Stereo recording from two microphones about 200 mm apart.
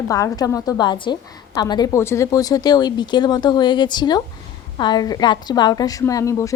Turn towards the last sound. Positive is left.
turn(degrees=15)  # may be behind; listen again after turning